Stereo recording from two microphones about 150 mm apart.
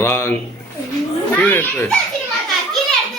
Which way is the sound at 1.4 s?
10° left (ahead or behind).